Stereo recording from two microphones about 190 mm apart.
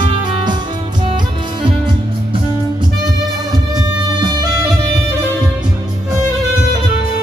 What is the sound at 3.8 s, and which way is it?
Music, 20° right (ahead or behind).